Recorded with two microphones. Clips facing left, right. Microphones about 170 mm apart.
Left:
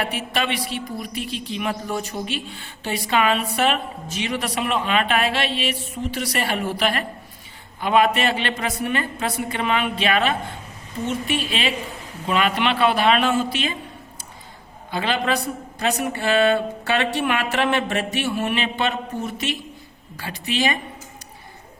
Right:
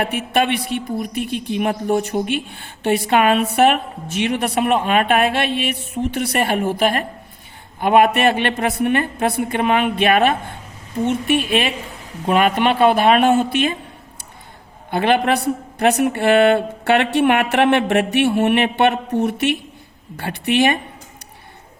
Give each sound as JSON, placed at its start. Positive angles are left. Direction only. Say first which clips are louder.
{"t": 0.0, "sound": "a woman's voice", "louder": "right 6 dB", "side_deg": -55}
{"t": 14.8, "sound": "a woman's voice", "louder": "right 6 dB", "side_deg": -55}